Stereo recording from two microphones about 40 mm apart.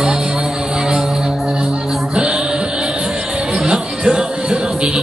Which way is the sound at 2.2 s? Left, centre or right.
Right.